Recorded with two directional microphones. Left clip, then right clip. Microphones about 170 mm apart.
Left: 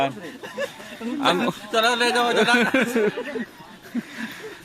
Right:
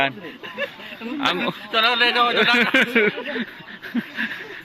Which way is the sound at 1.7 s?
70° left (ahead or behind).